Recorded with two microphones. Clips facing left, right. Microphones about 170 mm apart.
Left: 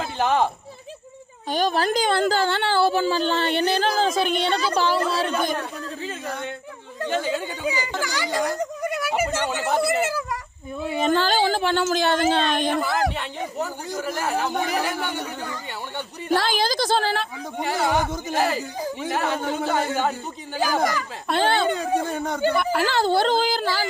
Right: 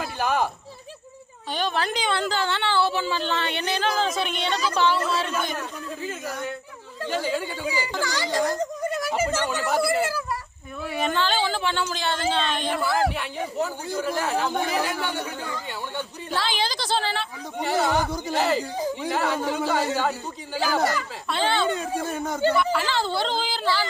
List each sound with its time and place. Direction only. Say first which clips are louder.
0.0 s a sound: left 3 dB; 25° left (ahead or behind)
1.5 s speech: left 5 dB; 40° left (ahead or behind)
7.0 s speech: left 2 dB; 20° left (ahead or behind)
11.1 s speech: left 5 dB; 40° left (ahead or behind)
12.8 s speech: even; 15° left (ahead or behind)
16.3 s a woman's voice: left 6 dB; 45° left (ahead or behind)
17.6 s speech: even; 15° left (ahead or behind)
21.2 s speech: left 3 dB; 50° left (ahead or behind)
21.7 s speech: left 3 dB; 30° left (ahead or behind)
22.5 s speech: left 2 dB; 50° left (ahead or behind)